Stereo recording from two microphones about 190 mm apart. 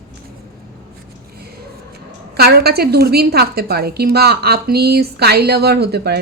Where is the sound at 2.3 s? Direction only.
55° right (ahead or behind).